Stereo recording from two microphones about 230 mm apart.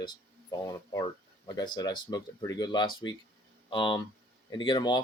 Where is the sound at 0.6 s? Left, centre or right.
Centre.